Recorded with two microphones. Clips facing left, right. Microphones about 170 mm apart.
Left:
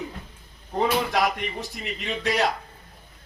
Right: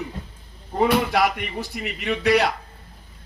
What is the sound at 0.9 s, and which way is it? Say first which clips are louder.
Speech: right 3 dB; 65° right (ahead or behind).